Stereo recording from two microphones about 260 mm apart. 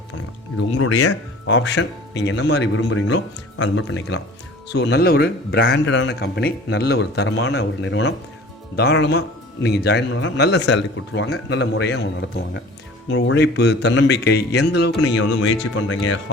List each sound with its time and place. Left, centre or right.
0.5 s a man's voice: left